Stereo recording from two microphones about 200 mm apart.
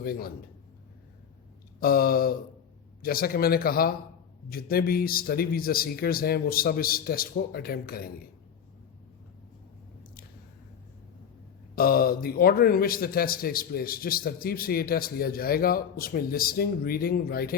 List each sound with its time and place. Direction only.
0.0 s a man's voice: 50° left (ahead or behind)
1.8 s a man's voice: 45° left (ahead or behind)
11.7 s a man's voice: 50° left (ahead or behind)